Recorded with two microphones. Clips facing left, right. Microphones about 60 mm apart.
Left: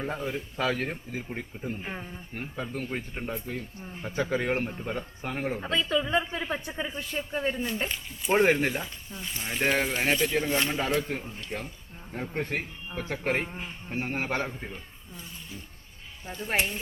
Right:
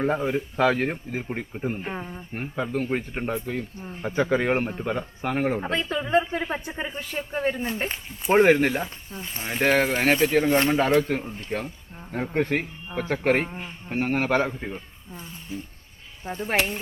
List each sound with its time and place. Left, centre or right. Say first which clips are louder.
0.2 s speech: right 7 dB; right
0.6 s speech: right 7 dB; right
1.8 s speech: right 5 dB; centre
2.3 s speech: right 7 dB; right
5.2 s speech: right 7 dB; right
5.5 s speech: right 1 dB; right
13.5 s speech: right 2 dB; centre
14.0 s speech: right 7 dB; right
14.6 s speech: right 6 dB; right